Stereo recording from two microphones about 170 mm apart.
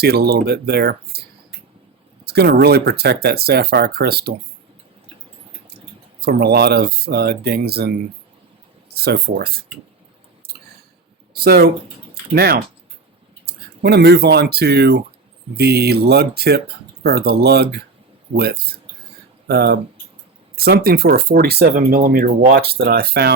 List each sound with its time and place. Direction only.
0.0 s speech: 70° right (ahead or behind)
2.2 s speech: 70° right (ahead or behind)
6.1 s speech: 70° right (ahead or behind)
9.0 s speech: 70° right (ahead or behind)
11.3 s speech: 65° right (ahead or behind)